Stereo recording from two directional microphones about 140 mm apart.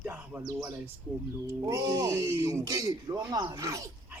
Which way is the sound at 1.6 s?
25° right (ahead or behind).